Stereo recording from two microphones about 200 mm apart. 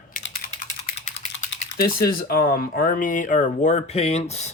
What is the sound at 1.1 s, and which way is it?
Speech, 55° left (ahead or behind).